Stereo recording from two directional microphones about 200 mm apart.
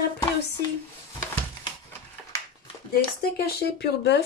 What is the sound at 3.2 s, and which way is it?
Speech, 55° left (ahead or behind).